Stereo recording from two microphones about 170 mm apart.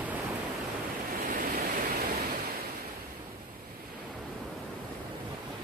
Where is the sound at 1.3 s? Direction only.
55° right (ahead or behind).